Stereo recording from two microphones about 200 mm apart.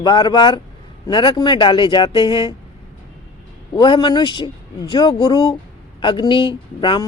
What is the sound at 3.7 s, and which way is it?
Speech, 25° left (ahead or behind).